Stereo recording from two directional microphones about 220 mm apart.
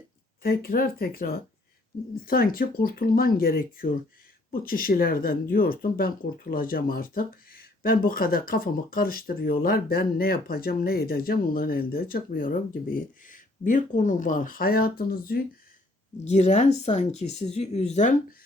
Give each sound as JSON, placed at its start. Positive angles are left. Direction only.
{"t": 0.4, "sound": "speech", "side_deg": 40}
{"t": 16.2, "sound": "speech", "side_deg": 30}